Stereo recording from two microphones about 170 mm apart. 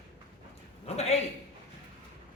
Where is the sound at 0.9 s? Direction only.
40° left (ahead or behind).